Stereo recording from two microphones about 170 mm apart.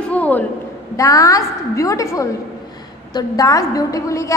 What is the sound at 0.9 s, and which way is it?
A woman's voice, 20° left (ahead or behind).